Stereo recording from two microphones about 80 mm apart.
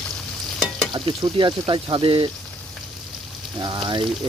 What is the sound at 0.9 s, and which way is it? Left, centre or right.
Speech, right.